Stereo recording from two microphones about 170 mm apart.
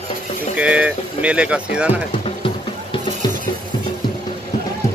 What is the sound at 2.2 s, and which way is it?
Music, 30° left (ahead or behind).